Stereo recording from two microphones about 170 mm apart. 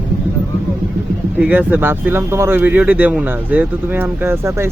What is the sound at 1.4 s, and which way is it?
A man's voice, 10° right (ahead or behind).